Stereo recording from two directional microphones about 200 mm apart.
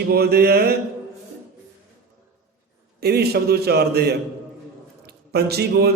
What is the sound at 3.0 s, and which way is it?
A man's voice, 50° right (ahead or behind).